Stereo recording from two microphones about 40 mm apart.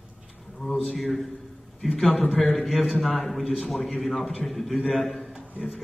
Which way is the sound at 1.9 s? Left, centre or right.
Left.